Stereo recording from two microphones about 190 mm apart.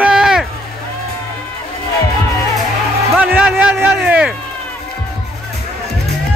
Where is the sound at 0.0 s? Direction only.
5° right (ahead or behind).